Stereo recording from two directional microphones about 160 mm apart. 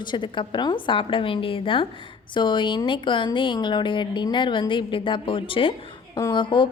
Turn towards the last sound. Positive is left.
turn(degrees=30)  # may be behind; listen again after turning